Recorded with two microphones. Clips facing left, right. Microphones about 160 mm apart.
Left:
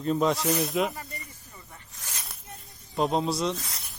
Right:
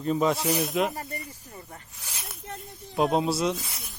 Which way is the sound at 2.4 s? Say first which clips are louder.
Right 8 dB; 75° right (ahead or behind).